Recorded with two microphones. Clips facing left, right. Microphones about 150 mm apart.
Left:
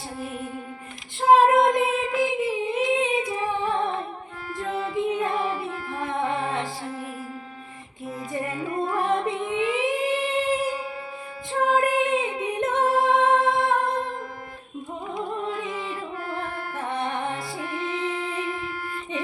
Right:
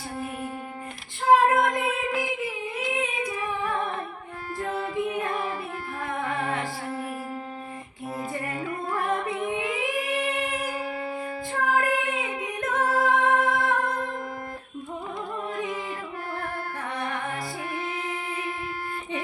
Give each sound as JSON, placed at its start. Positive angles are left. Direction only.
{"t": 1.4, "sound": "child singing", "side_deg": 25}
{"t": 4.9, "sound": "music", "side_deg": 25}
{"t": 8.7, "sound": "music", "side_deg": 25}
{"t": 9.8, "sound": "singing", "side_deg": 25}
{"t": 11.6, "sound": "music", "side_deg": 25}
{"t": 16.9, "sound": "music", "side_deg": 25}